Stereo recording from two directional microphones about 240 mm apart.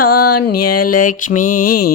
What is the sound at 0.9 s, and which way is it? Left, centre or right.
Mantra, left.